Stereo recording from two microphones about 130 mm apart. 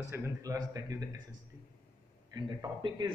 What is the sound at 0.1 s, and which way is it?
Speech, 25° right (ahead or behind).